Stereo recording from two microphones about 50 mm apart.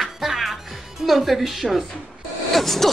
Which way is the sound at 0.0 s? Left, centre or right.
Centre.